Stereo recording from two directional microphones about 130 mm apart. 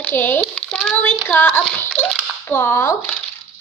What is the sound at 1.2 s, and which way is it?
A woman's voice, 15° left (ahead or behind).